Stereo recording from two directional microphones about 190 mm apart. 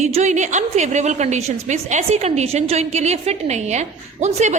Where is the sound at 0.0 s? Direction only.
35° right (ahead or behind).